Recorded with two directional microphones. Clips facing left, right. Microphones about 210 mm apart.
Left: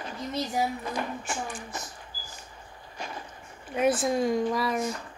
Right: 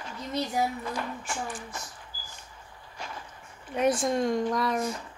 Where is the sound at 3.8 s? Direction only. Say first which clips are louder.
Left 1 dB; 5° left (ahead or behind).